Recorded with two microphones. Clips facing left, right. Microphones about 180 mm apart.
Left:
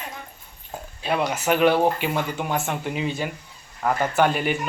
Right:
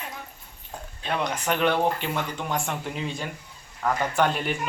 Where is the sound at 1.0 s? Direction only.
10° left (ahead or behind).